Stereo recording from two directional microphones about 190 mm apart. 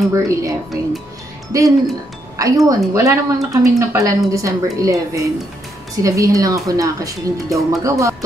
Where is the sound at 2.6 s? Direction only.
15° right (ahead or behind).